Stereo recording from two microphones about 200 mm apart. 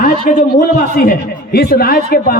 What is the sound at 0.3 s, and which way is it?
Speech, 45° left (ahead or behind).